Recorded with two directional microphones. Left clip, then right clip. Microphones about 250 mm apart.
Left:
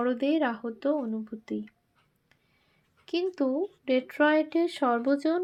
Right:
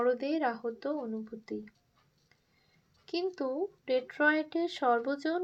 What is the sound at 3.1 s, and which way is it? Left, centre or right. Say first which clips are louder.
A woman's voice: left 5 dB; left.